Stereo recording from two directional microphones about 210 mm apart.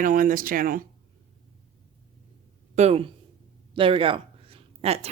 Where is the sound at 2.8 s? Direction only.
30° right (ahead or behind).